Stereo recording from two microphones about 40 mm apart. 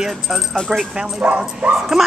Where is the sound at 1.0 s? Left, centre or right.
Right.